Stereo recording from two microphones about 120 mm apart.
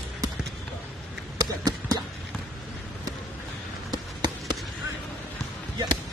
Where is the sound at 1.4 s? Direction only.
30° right (ahead or behind).